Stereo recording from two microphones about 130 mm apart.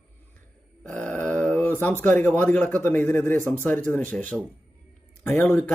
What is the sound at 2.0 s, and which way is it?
A man's voice, 15° left (ahead or behind).